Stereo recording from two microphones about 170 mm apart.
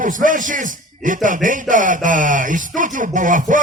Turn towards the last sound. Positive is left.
turn(degrees=-50)  # may be behind; listen again after turning